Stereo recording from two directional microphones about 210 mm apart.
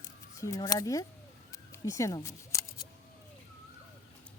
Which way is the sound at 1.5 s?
15° left (ahead or behind).